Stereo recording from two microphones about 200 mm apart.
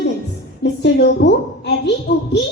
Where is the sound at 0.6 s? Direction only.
60° left (ahead or behind).